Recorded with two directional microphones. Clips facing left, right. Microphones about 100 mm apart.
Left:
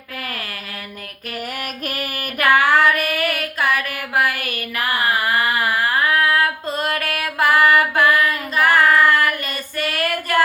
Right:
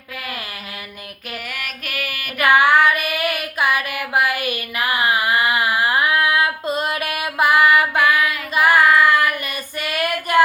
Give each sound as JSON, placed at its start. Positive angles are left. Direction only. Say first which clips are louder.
{"t": 1.5, "sound": "female singing", "louder": "left 3 dB", "side_deg": 40}
{"t": 2.4, "sound": "child singing", "louder": "right 1 dB", "side_deg": -15}
{"t": 3.8, "sound": "music", "louder": "right 1 dB", "side_deg": -15}
{"t": 4.4, "sound": "a sound", "louder": "right 1 dB", "side_deg": -15}
{"t": 8.5, "sound": "child singing", "louder": "right 1 dB", "side_deg": -10}